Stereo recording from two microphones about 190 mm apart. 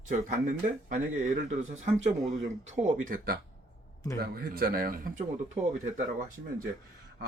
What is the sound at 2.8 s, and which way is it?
Speech, 45° right (ahead or behind).